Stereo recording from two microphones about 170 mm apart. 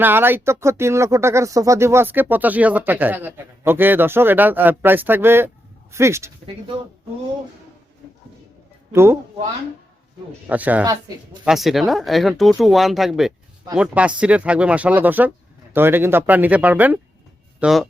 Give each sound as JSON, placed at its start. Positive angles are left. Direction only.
{"t": 0.0, "sound": "speech", "side_deg": -10}
{"t": 8.9, "sound": "a man's voice", "side_deg": -15}
{"t": 10.4, "sound": "speech", "side_deg": -10}